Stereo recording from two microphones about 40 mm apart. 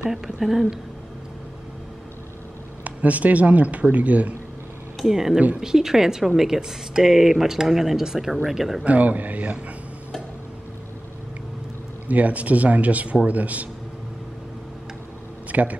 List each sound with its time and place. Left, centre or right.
0.1 s speech: centre
2.8 s speech: right
5.0 s speech: centre
8.8 s speech: right
12.1 s speech: right
15.5 s speech: right